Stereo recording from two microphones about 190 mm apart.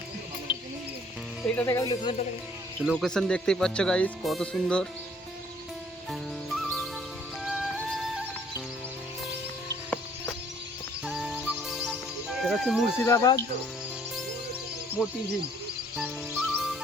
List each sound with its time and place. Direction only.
1.5 s speech: 15° left (ahead or behind)
2.8 s speech: centre (ahead or behind)
6.1 s music: centre (ahead or behind)
11.0 s music: centre (ahead or behind)
13.1 s speech: 15° left (ahead or behind)
15.0 s speech: 5° right (ahead or behind)
16.0 s music: 5° right (ahead or behind)